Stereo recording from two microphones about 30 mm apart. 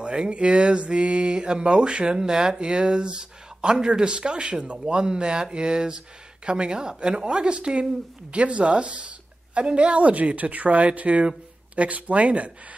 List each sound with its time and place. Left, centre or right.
0.0 s a sound: right
2.6 s speech: right
4.8 s speech: right
6.4 s a sound: right
8.3 s a woman's voice: right
11.0 s speech: right